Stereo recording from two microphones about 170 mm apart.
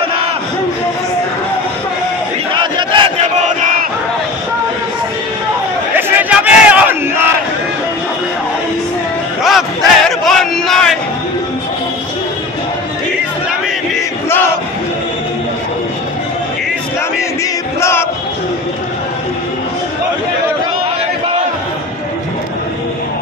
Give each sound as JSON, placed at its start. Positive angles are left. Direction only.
{"t": 2.5, "sound": "battle cry", "side_deg": -30}
{"t": 3.3, "sound": "crowd", "side_deg": -45}
{"t": 5.9, "sound": "battle cry", "side_deg": -10}
{"t": 9.4, "sound": "a sound", "side_deg": 0}
{"t": 17.7, "sound": "music", "side_deg": 15}